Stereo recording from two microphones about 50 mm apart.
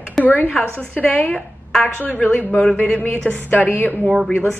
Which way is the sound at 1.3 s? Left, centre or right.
Centre.